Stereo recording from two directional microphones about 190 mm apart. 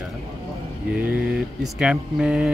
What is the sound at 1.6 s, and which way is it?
Speech, 5° right (ahead or behind).